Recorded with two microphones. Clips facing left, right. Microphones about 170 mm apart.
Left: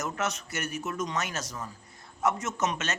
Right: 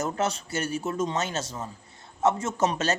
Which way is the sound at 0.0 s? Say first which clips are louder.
Right 4 dB; 30° right (ahead or behind).